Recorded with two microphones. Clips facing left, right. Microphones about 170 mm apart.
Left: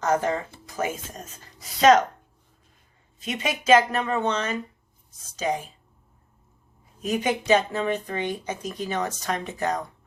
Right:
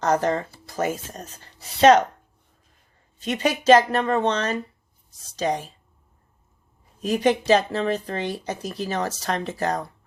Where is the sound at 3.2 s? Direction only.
35° right (ahead or behind).